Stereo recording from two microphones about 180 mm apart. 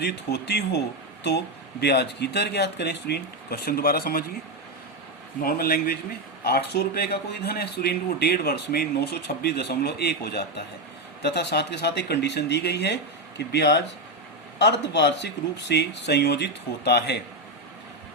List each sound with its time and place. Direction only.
0.0 s speech: 65° left (ahead or behind)
1.8 s speech: 65° left (ahead or behind)
5.4 s speech: 55° left (ahead or behind)